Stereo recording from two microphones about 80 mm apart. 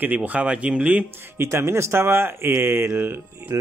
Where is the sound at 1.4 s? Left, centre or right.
Right.